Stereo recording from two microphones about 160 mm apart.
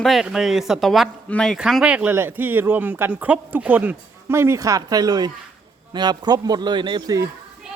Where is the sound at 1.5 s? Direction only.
5° right (ahead or behind); by 7.2 s 30° right (ahead or behind).